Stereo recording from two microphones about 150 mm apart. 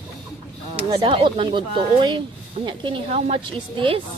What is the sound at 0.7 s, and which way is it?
Speech, 40° right (ahead or behind).